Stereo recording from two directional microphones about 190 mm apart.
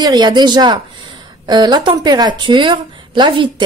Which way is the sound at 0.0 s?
20° right (ahead or behind).